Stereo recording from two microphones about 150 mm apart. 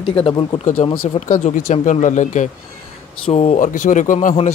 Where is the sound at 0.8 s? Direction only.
45° left (ahead or behind).